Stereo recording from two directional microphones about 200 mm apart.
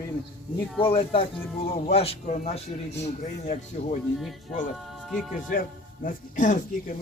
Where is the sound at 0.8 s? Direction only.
25° left (ahead or behind).